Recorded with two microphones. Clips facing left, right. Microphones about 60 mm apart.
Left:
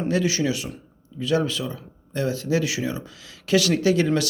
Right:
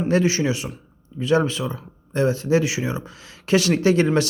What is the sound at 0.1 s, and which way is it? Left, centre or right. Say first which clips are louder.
Speech: right 3 dB; right.